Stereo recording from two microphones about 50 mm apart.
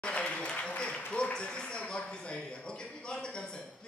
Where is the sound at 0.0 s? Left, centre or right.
Left.